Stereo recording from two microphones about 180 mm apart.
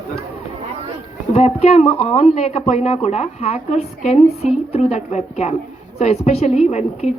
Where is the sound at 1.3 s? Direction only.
35° left (ahead or behind).